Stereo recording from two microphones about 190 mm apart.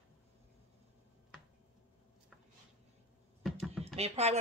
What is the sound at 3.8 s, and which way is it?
Speech, 35° right (ahead or behind).